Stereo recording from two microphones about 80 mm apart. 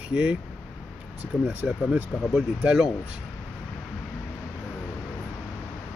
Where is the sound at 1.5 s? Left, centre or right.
Right.